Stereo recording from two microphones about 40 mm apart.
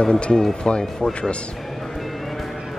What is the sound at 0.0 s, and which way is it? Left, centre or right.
Speech, left.